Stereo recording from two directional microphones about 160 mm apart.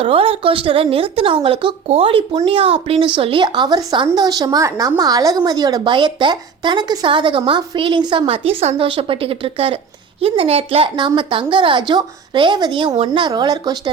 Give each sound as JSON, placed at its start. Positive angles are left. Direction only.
{"t": 0.0, "sound": "a woman's voice", "side_deg": -35}